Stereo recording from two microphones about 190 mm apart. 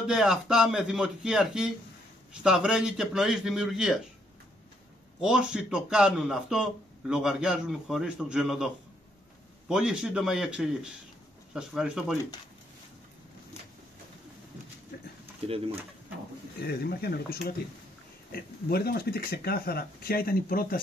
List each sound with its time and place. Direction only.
0.0 s speech: 5° right (ahead or behind)
5.2 s speech: 5° right (ahead or behind)
9.7 s speech: 5° right (ahead or behind)
15.4 s speech: 30° right (ahead or behind)
16.6 s speech: 55° left (ahead or behind)